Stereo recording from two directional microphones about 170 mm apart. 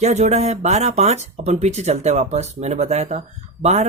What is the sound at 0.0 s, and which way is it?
Speech, 40° right (ahead or behind).